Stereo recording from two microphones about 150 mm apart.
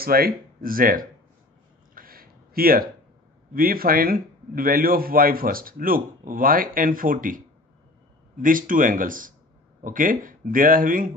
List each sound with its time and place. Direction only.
0.0 s a man's voice: 85° right; by 1.0 s 70° right (ahead or behind)
2.0 s a sound: 75° right (ahead or behind)
3.5 s a man's voice: 75° right (ahead or behind)